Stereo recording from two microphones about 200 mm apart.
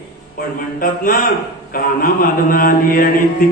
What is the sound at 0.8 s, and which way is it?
A man's voice, 45° left (ahead or behind).